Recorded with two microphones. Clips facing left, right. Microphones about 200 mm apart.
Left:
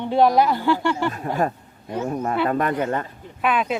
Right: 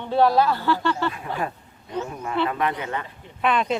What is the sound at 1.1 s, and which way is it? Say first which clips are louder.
Speech: left 5 dB; 45° left (ahead or behind).